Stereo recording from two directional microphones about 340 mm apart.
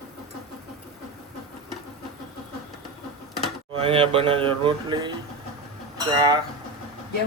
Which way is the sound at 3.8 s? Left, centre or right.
Centre.